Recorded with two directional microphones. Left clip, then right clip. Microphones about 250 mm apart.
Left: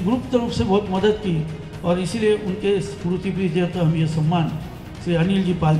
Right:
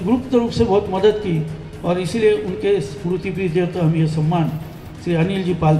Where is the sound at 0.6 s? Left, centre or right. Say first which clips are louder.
Right 6 dB; right.